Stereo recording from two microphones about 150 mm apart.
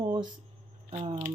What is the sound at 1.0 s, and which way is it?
Speech, 45° right (ahead or behind).